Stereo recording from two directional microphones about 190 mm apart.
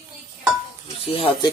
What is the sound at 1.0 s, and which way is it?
Speech, 30° left (ahead or behind).